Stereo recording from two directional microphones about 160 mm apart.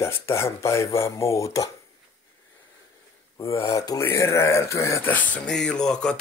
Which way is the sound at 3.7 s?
20° left (ahead or behind).